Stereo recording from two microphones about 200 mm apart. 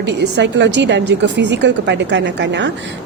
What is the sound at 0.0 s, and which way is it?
A woman's voice, 60° right (ahead or behind).